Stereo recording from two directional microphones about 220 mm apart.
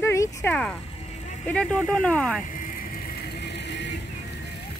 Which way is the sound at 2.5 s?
40° left (ahead or behind).